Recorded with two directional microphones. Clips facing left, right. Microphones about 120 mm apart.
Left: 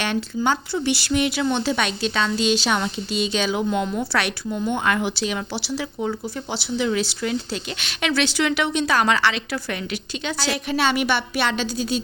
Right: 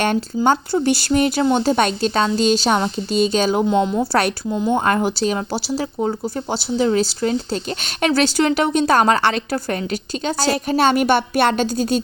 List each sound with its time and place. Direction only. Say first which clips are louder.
0.0 s a woman's voice: right 5 dB; 45° right (ahead or behind)
3.7 s a woman's voice: right 6 dB; 30° right (ahead or behind); by 12.0 s 50° right (ahead or behind)